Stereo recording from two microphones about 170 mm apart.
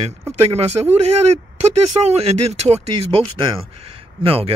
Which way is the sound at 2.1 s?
35° right (ahead or behind).